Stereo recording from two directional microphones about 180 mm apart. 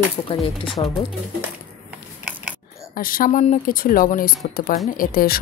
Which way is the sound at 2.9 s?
50° left (ahead or behind).